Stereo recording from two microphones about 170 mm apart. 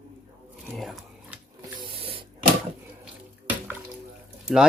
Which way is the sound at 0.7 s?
Centre (ahead or behind).